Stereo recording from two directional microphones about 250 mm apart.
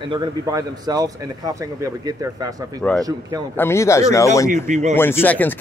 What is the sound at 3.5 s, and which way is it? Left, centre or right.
Speech, centre.